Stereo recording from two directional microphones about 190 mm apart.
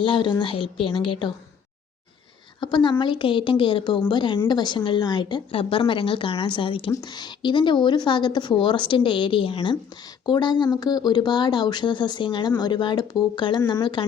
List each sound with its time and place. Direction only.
0.0 s speech: 25° left (ahead or behind)
2.6 s speech: 25° left (ahead or behind)
13.8 s speech: 25° left (ahead or behind)